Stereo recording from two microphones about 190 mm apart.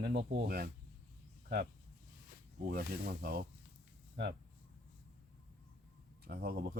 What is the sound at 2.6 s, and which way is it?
Speech, 55° right (ahead or behind).